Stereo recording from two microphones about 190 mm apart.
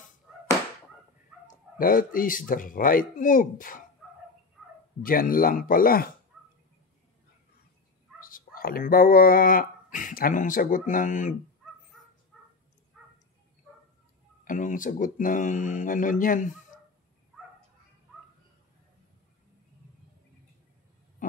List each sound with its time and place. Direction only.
0.3 s chop: centre (ahead or behind)
1.8 s speech: 45° left (ahead or behind)
5.0 s speech: 50° left (ahead or behind)
8.3 s speech: 50° left (ahead or behind)
12.3 s crow: centre (ahead or behind)
14.4 s speech: 45° left (ahead or behind)
21.2 s a sound: 45° left (ahead or behind)